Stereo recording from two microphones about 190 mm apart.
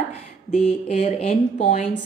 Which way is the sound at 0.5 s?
35° left (ahead or behind).